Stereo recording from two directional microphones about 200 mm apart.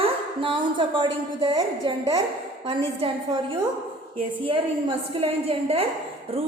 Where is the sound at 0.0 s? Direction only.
25° right (ahead or behind).